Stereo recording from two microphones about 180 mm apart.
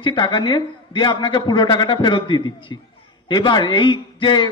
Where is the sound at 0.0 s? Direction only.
25° left (ahead or behind).